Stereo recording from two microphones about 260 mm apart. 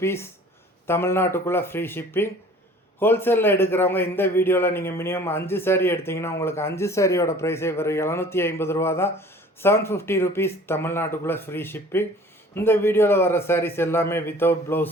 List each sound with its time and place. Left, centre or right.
0.0 s a man's voice: centre